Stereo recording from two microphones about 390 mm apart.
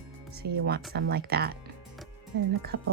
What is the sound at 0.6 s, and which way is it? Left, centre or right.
Speech, right.